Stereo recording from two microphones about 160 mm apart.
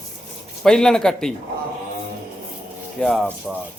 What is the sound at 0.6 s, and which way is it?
Speech, 5° left (ahead or behind).